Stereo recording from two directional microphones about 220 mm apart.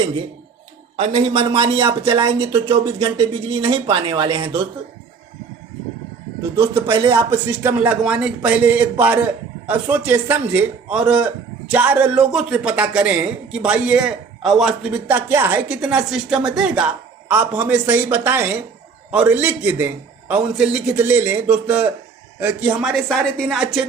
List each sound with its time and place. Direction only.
0.9 s speech: 30° right (ahead or behind)
6.9 s speech: 20° right (ahead or behind)
7.3 s a man's voice: 10° right (ahead or behind)